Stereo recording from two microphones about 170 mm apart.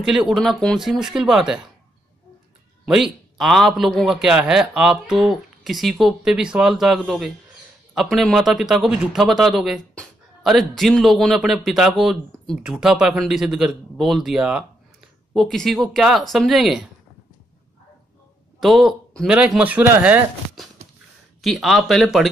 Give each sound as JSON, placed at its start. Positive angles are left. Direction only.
{"t": 0.0, "sound": "a man's voice", "side_deg": -5}
{"t": 2.8, "sound": "a man's voice", "side_deg": 0}
{"t": 18.6, "sound": "a man's voice", "side_deg": 0}